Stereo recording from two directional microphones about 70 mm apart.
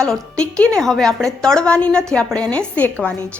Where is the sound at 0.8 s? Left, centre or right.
Centre.